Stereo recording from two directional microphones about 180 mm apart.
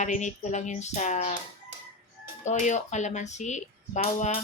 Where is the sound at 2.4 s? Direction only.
45° left (ahead or behind).